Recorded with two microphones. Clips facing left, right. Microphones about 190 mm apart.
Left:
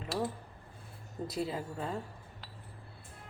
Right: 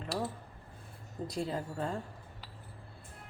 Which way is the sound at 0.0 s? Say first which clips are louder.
Left 1 dB; 5° left (ahead or behind).